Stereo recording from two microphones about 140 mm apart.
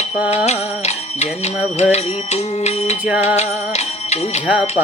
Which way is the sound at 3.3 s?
50° left (ahead or behind).